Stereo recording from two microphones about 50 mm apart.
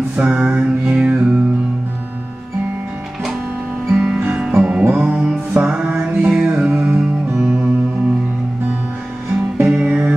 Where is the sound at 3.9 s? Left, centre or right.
Centre.